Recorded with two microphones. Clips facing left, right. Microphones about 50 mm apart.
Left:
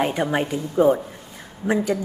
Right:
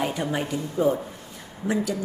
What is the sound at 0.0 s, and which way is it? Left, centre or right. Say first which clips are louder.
A man's voice: left 5 dB; left.